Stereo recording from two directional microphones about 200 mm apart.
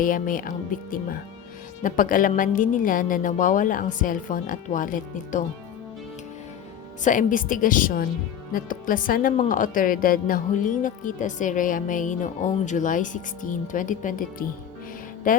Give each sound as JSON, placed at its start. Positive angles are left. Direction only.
{"t": 0.0, "sound": "speech", "side_deg": 45}
{"t": 7.0, "sound": "speech", "side_deg": 40}